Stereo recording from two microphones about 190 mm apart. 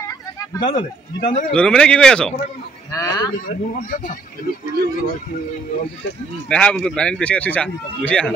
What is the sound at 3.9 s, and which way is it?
Speech, 45° left (ahead or behind).